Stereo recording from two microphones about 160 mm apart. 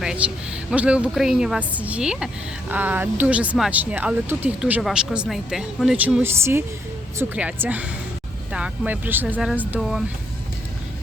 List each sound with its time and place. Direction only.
0.0 s a woman's voice: 5° right (ahead or behind)
6.2 s a woman's voice: 15° right (ahead or behind)